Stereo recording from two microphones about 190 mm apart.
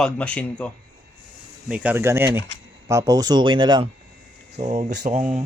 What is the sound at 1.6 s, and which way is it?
Speech, 5° right (ahead or behind).